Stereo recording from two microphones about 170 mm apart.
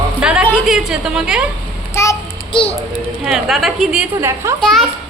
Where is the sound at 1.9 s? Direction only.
15° left (ahead or behind).